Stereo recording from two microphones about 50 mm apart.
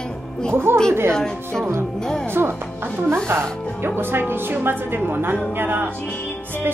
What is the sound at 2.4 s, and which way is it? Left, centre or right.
Speech, right.